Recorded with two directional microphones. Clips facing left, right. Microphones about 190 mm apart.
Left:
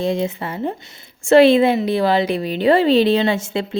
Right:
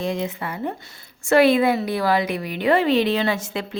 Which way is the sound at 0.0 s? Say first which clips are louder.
Left 5 dB; 30° left (ahead or behind).